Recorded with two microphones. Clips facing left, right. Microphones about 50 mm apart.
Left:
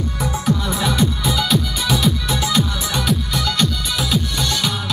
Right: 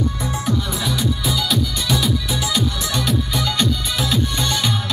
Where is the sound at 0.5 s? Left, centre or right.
Left.